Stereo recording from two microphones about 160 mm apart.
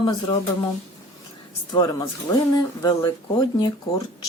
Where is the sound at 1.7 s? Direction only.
25° left (ahead or behind).